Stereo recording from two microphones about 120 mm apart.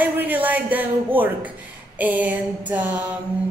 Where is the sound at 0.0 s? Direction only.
15° right (ahead or behind).